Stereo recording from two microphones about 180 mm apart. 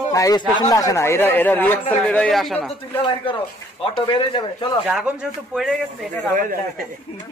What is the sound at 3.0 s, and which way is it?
Speech, 30° left (ahead or behind).